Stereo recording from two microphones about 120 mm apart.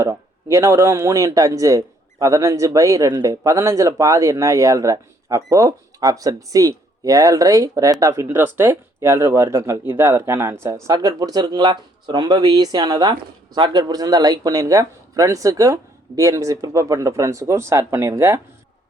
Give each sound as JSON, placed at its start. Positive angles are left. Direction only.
{"t": 0.0, "sound": "speech", "side_deg": -25}